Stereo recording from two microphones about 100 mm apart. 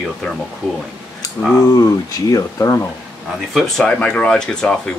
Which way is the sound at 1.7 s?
35° left (ahead or behind).